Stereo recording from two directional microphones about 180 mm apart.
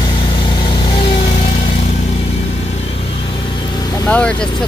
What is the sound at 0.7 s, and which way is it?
Vehicle, 30° left (ahead or behind).